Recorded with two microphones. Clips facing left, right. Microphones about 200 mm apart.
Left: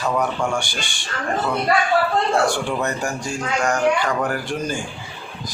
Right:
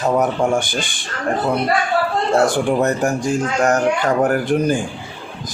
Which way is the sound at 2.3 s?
45° right (ahead or behind).